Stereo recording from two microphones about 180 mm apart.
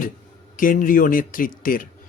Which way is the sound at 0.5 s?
50° left (ahead or behind).